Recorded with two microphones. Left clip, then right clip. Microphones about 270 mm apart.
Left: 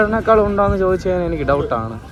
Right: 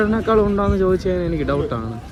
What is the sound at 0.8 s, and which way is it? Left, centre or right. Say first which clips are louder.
A man's voice: left 2 dB; centre.